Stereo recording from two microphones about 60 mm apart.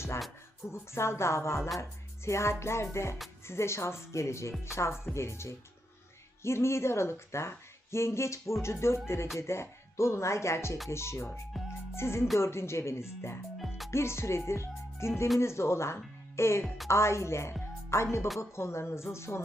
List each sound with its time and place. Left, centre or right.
0.7 s a woman's voice: left
11.6 s music: centre
11.9 s a woman's voice: left
13.6 s music: centre
13.9 s a woman's voice: left
16.6 s a woman's voice: centre
16.9 s a woman's voice: left